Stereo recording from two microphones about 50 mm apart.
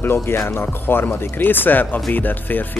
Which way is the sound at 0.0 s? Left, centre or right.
Left.